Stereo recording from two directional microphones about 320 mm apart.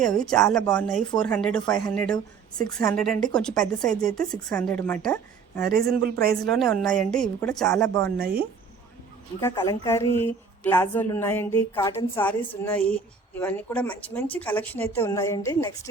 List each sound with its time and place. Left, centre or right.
0.0 s speech: centre
0.6 s a woman's voice: centre
6.0 s a man's voice: right
6.3 s speech: centre
9.4 s a woman's voice: centre